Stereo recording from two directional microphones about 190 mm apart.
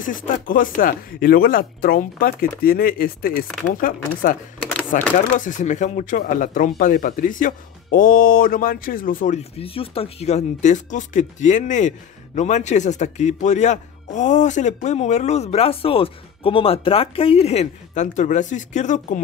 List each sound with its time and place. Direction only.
0.0 s speech: 45° left (ahead or behind)